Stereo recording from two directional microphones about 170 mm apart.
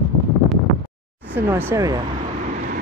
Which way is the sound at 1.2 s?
10° right (ahead or behind).